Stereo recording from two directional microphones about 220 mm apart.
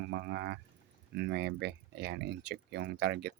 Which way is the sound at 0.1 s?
50° right (ahead or behind).